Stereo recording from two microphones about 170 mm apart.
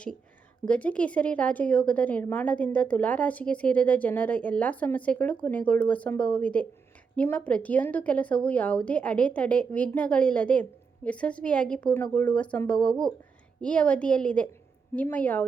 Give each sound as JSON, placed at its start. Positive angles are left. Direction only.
{"t": 0.7, "sound": "a woman's voice", "side_deg": 10}